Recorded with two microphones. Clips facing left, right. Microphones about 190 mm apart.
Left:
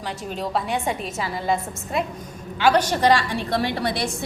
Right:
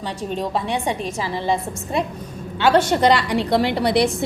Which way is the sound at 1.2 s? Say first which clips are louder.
Right 1 dB; 30° right (ahead or behind).